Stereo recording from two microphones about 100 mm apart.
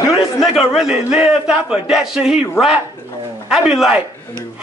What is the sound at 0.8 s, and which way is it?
A man's voice, 10° right (ahead or behind).